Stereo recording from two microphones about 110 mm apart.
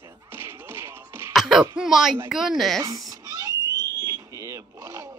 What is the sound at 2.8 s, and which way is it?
Cat, 35° right (ahead or behind).